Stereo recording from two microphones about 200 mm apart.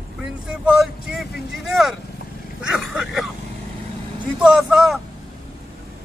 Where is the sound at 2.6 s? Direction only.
5° right (ahead or behind).